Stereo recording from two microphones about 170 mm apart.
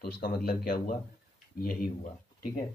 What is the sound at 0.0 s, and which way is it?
Speech, 60° left (ahead or behind).